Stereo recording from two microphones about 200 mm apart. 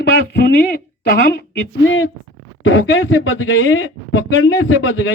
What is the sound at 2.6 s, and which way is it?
Speech, 75° left (ahead or behind).